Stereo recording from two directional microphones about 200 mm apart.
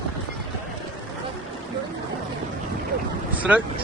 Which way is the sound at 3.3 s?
5° right (ahead or behind).